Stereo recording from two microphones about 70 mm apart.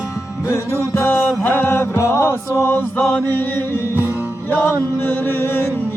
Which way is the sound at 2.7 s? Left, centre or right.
Left.